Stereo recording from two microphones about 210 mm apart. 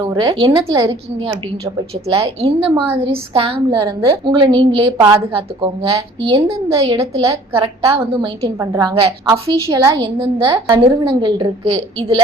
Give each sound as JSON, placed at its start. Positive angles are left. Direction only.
{"t": 0.0, "sound": "a woman's voice", "side_deg": -20}